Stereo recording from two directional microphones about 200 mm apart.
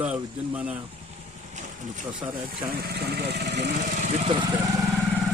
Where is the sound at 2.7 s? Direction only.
50° right (ahead or behind).